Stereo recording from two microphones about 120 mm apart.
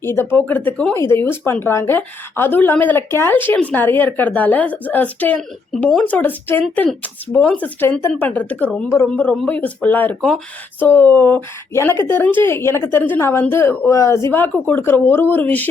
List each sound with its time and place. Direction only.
0.0 s a woman's voice: 20° left (ahead or behind)